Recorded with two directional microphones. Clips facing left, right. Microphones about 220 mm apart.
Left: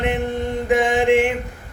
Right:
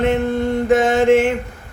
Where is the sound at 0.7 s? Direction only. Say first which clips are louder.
Right 3 dB; 15° left (ahead or behind).